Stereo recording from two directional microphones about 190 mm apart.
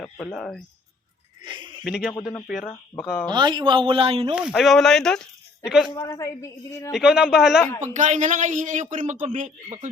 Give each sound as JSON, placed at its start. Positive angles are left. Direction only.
{"t": 0.0, "sound": "speech", "side_deg": 0}
{"t": 1.5, "sound": "speech", "side_deg": -25}
{"t": 1.8, "sound": "speech", "side_deg": 0}
{"t": 2.6, "sound": "speech", "side_deg": 15}
{"t": 3.2, "sound": "speech", "side_deg": -25}
{"t": 4.4, "sound": "speech", "side_deg": 0}
{"t": 5.9, "sound": "speech", "side_deg": 20}
{"t": 6.9, "sound": "speech", "side_deg": -5}
{"t": 7.9, "sound": "speech", "side_deg": -40}